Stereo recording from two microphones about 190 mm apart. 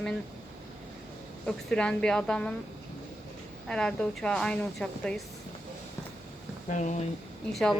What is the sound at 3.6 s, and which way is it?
A woman's voice, 5° left (ahead or behind).